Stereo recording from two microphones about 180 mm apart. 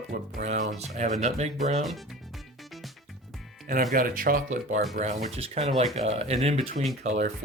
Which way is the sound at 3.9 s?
50° right (ahead or behind).